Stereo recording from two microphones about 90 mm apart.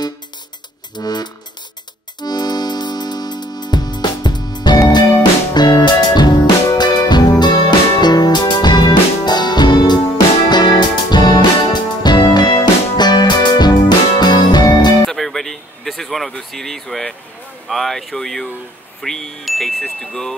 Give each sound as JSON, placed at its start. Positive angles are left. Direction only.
{"t": 0.9, "sound": "music", "side_deg": 50}
{"t": 15.0, "sound": "a sound", "side_deg": 0}
{"t": 18.9, "sound": "chime", "side_deg": 5}